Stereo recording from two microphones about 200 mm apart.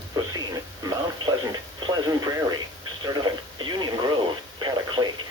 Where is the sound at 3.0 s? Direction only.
20° right (ahead or behind).